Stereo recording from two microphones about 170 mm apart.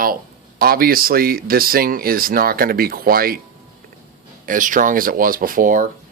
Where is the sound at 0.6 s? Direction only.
60° right (ahead or behind).